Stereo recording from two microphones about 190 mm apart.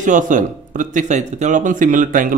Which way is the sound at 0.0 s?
40° right (ahead or behind).